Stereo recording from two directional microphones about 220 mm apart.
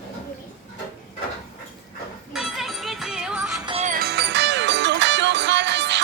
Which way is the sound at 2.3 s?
Centre (ahead or behind).